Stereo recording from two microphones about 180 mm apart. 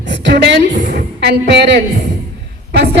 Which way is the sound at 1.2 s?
65° right (ahead or behind).